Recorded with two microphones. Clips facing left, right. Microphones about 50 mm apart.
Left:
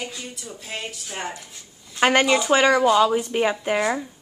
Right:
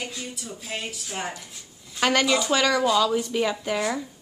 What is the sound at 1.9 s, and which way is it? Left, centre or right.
A woman's voice, left.